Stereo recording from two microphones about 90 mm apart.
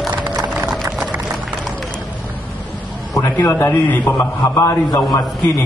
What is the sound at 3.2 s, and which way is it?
Speech, 30° left (ahead or behind).